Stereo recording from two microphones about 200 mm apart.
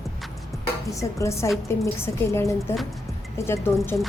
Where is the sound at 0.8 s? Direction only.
15° left (ahead or behind).